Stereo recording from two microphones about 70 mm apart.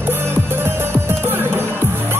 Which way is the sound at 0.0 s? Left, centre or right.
Right.